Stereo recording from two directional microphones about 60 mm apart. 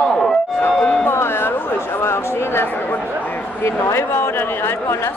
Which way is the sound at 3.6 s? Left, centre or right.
Left.